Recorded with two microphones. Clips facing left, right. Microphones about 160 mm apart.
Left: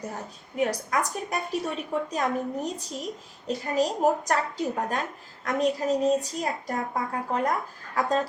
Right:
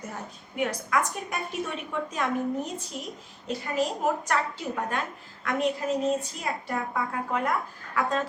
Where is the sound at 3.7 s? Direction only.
40° left (ahead or behind).